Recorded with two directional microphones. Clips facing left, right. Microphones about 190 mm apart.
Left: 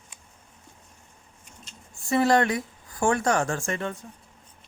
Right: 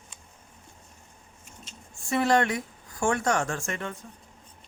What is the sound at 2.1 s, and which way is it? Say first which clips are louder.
Speech: left 2 dB; 35° left (ahead or behind).